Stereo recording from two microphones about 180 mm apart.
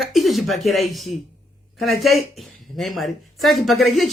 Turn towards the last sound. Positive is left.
turn(degrees=0)  # may be behind; listen again after turning